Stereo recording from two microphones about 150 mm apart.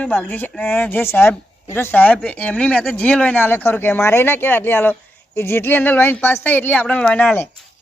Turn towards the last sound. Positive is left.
turn(degrees=10)  # may be behind; listen again after turning